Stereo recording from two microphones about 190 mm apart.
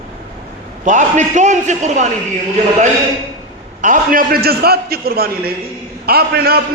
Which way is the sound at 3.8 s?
45° right (ahead or behind).